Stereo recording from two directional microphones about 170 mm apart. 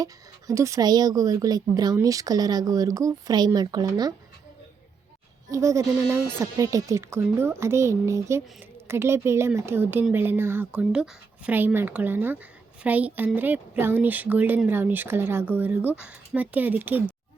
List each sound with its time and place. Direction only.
0.0 s a woman's voice: 20° right (ahead or behind)
5.5 s speech: 20° right (ahead or behind)